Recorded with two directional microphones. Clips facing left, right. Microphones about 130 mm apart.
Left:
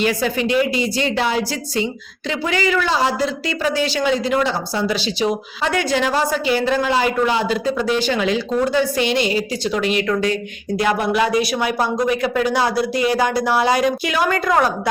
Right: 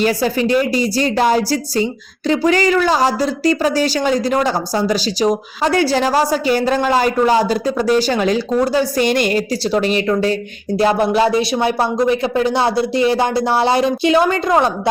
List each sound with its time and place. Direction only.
0.0 s a woman's voice: 35° right (ahead or behind)
9.6 s a woman's voice: 35° right (ahead or behind)